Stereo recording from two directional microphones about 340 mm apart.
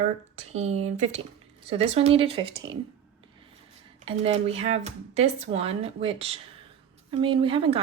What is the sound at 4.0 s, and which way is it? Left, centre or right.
Speech, centre.